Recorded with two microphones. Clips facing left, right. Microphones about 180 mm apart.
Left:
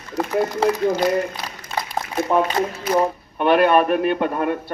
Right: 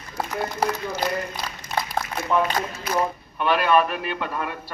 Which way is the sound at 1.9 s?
35° left (ahead or behind).